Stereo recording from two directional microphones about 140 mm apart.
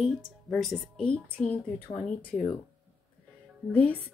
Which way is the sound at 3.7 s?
10° left (ahead or behind).